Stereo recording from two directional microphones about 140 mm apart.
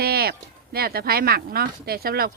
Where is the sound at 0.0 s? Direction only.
90° right.